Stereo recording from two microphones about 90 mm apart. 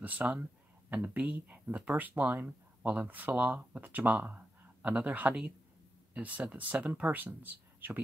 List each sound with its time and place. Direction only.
0.0 s speech: 20° right (ahead or behind)